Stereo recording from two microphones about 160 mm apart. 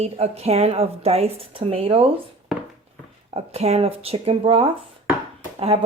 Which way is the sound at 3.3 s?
40° right (ahead or behind).